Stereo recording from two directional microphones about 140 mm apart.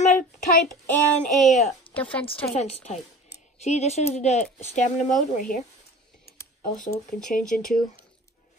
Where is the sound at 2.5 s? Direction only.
50° left (ahead or behind).